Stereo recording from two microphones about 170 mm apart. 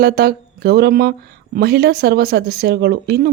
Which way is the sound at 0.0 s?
65° right (ahead or behind).